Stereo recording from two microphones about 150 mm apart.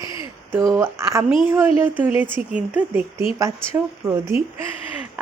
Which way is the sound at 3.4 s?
20° right (ahead or behind).